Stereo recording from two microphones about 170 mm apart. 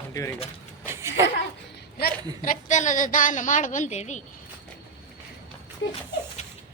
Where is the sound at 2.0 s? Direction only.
50° left (ahead or behind).